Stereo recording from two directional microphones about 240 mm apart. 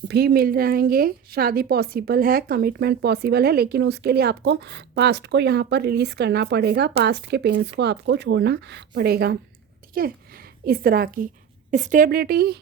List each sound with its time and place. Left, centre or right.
0.1 s a woman's voice: right